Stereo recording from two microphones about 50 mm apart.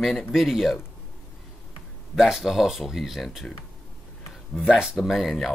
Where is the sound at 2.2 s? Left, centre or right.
Centre.